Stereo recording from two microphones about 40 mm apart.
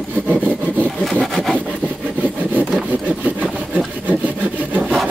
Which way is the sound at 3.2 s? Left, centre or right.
Right.